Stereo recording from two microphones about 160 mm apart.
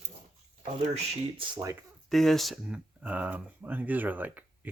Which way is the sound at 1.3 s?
25° right (ahead or behind).